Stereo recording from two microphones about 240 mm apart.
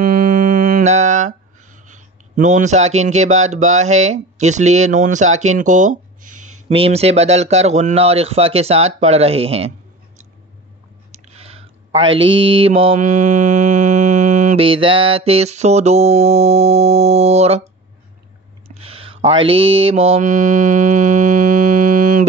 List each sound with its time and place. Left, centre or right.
0.0 s a sound: right
6.7 s mantra: right
11.1 s clicking: right
12.2 s mantra: right
12.5 s mantra: right
18.8 s mantra: right